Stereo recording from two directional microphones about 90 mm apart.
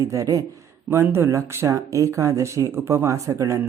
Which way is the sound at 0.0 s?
35° right (ahead or behind).